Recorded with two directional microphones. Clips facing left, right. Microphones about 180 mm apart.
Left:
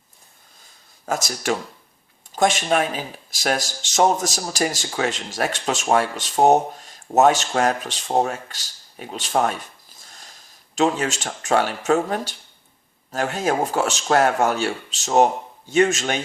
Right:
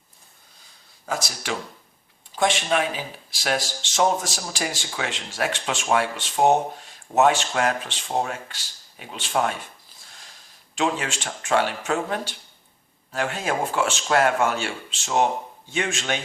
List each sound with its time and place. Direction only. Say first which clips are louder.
1.0 s speech: left 5 dB; 45° left (ahead or behind)